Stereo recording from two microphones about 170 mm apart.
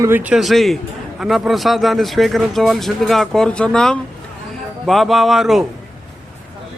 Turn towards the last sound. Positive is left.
turn(degrees=0)  # may be behind; listen again after turning